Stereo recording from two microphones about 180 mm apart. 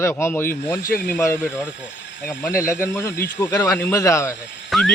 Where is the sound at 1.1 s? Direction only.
15° left (ahead or behind).